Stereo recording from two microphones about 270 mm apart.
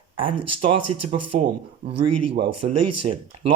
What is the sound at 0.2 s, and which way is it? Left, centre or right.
Speech, centre.